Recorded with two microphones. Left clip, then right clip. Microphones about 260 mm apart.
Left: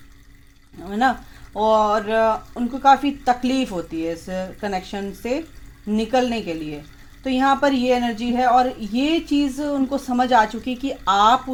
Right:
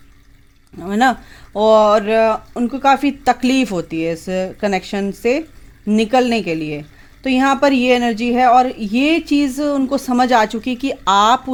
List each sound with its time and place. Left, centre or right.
0.8 s a woman's voice: right